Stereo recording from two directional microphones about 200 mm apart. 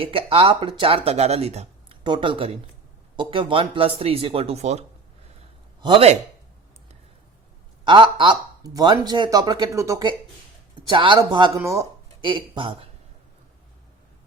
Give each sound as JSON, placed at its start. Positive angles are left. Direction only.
{"t": 0.0, "sound": "speech", "side_deg": -25}
{"t": 7.9, "sound": "speech", "side_deg": -25}